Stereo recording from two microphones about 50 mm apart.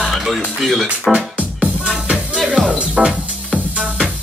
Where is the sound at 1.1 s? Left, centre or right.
Right.